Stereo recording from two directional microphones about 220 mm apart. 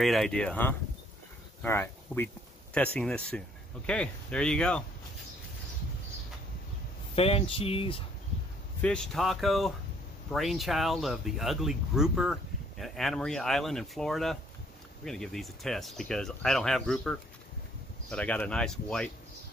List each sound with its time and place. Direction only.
0.0 s speech: centre (ahead or behind)
7.2 s speech: 25° left (ahead or behind)
8.8 s speech: 5° left (ahead or behind)